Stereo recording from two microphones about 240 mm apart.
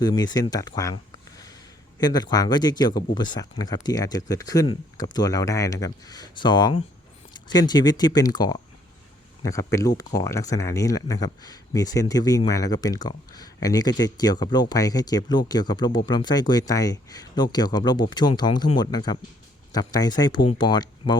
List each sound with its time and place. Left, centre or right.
0.0 s speech: centre
2.0 s speech: centre
10.2 s speech: centre